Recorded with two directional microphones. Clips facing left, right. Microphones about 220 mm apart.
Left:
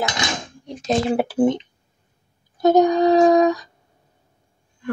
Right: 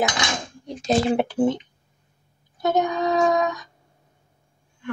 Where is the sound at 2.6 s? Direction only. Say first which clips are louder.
Left 7 dB; 35° left (ahead or behind).